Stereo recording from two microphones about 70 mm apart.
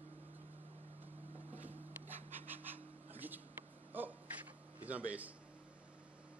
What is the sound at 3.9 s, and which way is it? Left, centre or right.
Gasp, right.